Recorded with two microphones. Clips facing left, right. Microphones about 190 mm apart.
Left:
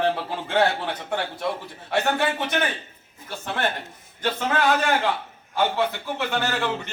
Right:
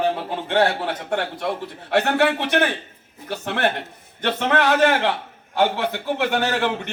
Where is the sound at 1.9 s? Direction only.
65° right (ahead or behind).